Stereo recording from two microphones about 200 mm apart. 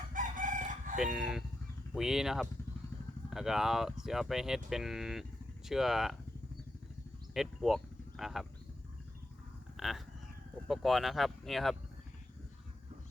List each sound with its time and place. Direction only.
0.1 s chicken: 40° right (ahead or behind)
0.9 s speech: 5° right (ahead or behind)
7.3 s speech: centre (ahead or behind)
9.7 s a sound: centre (ahead or behind)
10.7 s speech: centre (ahead or behind)